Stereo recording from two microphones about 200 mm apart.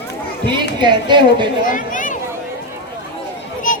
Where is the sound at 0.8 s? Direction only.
25° right (ahead or behind).